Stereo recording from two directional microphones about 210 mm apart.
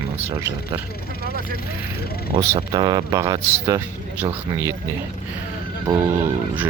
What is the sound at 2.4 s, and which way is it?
A man's voice, 20° right (ahead or behind).